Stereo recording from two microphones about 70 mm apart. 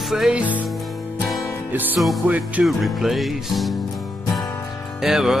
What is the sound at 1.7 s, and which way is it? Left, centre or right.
Music, right.